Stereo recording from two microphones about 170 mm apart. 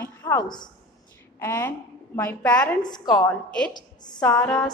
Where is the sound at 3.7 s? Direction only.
25° left (ahead or behind).